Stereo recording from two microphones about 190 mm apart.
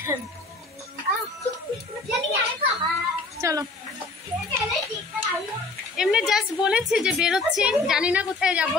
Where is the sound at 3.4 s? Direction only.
15° right (ahead or behind).